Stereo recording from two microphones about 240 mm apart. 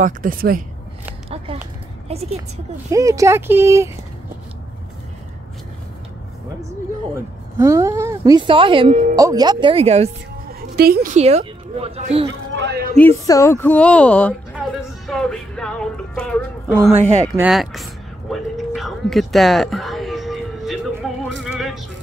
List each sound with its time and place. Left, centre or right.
0.0 s a woman's voice: right
2.0 s a woman's voice: right
2.9 s speech: centre
7.5 s a woman's voice: centre
10.8 s a woman's voice: right
12.3 s a man's voice: right
12.9 s speech: centre
18.3 s music: centre